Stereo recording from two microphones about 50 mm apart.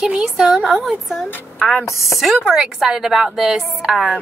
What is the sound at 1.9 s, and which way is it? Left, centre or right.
Speech, left.